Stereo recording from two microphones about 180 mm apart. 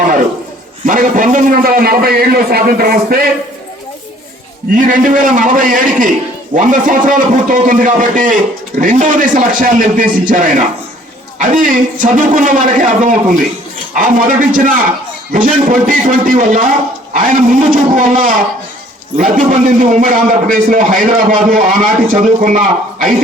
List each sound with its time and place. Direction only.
0.9 s a man's voice: 50° right (ahead or behind)
4.8 s a man's voice: 45° right (ahead or behind)